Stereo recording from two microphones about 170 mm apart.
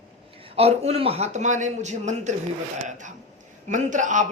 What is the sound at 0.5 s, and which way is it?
Speech, 35° right (ahead or behind).